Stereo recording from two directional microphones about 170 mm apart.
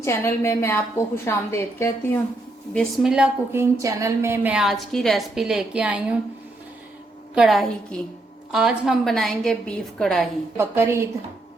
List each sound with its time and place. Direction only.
0.0 s a woman's voice: 15° left (ahead or behind)
2.7 s a woman's voice: centre (ahead or behind)
3.5 s a sound: 15° right (ahead or behind)
4.5 s a woman's voice: centre (ahead or behind)
7.3 s a woman's voice: centre (ahead or behind)
10.6 s a sound: 15° right (ahead or behind)